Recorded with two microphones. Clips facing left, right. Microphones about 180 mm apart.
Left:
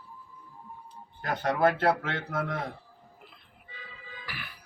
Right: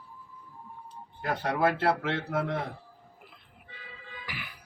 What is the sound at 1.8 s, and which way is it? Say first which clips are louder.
Speech: even; 5° right (ahead or behind).